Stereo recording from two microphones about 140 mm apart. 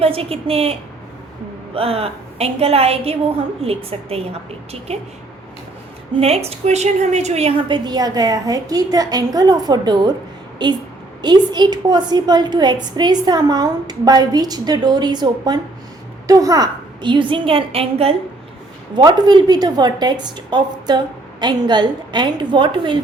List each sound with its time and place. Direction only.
0.0 s a woman's voice: 40° right (ahead or behind)
6.1 s a woman's voice: 45° right (ahead or behind)
7.7 s a woman's voice: 30° right (ahead or behind)
18.9 s a woman's voice: 30° right (ahead or behind)